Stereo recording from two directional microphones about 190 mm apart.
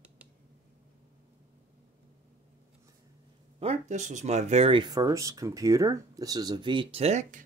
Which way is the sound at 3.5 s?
35° right (ahead or behind).